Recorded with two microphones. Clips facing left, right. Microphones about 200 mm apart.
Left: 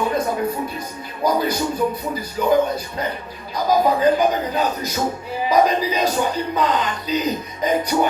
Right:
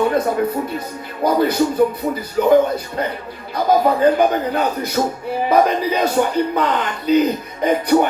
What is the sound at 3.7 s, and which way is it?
Speech, 55° right (ahead or behind).